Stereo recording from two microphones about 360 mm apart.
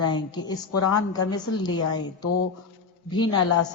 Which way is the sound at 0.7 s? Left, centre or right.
Left.